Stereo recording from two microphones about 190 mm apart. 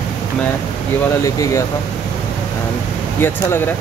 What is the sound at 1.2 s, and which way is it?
Speech, 15° left (ahead or behind).